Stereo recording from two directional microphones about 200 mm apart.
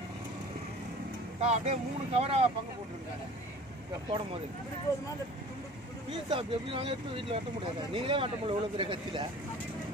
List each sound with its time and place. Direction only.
1.4 s speech: 35° right (ahead or behind)
6.3 s speech: 30° right (ahead or behind)